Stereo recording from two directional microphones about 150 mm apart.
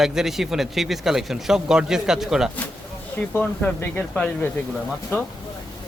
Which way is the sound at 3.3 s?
10° left (ahead or behind).